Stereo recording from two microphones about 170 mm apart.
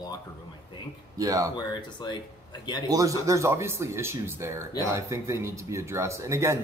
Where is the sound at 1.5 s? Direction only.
25° left (ahead or behind).